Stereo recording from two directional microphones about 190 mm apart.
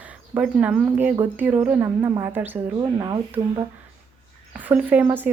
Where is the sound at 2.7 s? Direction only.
20° right (ahead or behind).